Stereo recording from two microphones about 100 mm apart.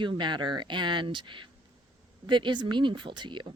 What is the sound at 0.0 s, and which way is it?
Speech, 50° right (ahead or behind).